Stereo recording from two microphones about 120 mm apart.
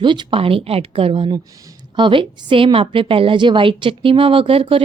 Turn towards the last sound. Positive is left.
turn(degrees=-50)  # may be behind; listen again after turning